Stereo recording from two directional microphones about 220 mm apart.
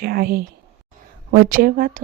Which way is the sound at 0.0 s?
45° right (ahead or behind).